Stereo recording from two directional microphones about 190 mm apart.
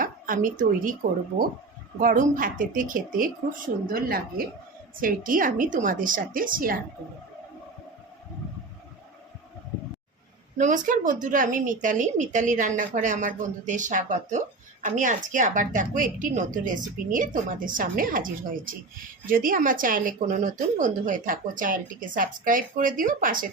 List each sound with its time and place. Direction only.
0.0 s speech: 45° right (ahead or behind)
2.0 s a woman's voice: 45° right (ahead or behind)
10.6 s a woman's voice: 40° right (ahead or behind)